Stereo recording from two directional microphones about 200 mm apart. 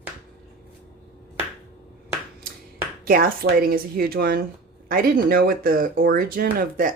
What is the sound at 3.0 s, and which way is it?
Speech, 50° right (ahead or behind).